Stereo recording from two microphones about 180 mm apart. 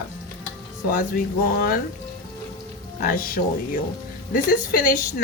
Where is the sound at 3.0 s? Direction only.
55° left (ahead or behind).